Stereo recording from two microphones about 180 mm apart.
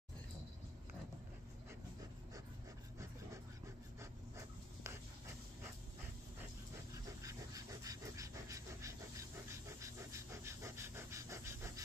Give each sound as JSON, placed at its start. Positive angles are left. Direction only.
{"t": 4.0, "sound": "dog", "side_deg": -15}
{"t": 7.2, "sound": "pant", "side_deg": -20}